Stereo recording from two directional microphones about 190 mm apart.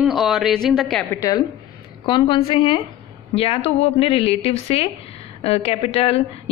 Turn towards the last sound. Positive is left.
turn(degrees=30)  # may be behind; listen again after turning